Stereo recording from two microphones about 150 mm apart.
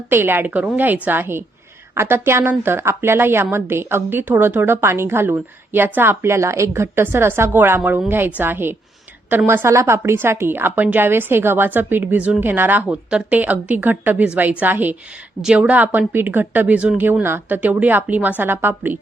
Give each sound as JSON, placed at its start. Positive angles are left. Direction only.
{"t": 0.1, "sound": "a woman's voice", "side_deg": -15}